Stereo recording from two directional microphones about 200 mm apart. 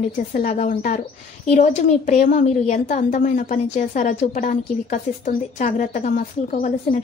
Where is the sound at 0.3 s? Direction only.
40° left (ahead or behind).